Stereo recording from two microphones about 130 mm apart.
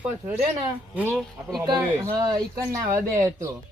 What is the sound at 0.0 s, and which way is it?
Speech, 15° right (ahead or behind).